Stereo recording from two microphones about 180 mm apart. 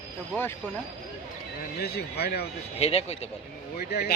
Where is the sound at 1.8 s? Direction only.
65° left (ahead or behind).